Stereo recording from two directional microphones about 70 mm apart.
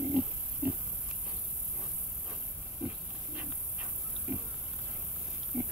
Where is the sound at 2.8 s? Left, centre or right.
Right.